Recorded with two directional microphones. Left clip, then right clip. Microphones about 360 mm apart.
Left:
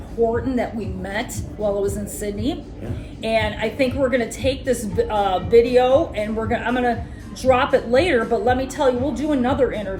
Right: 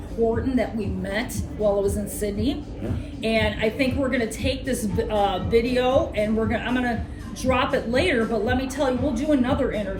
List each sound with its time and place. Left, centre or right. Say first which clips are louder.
0.5 s a woman's voice: left 1 dB; centre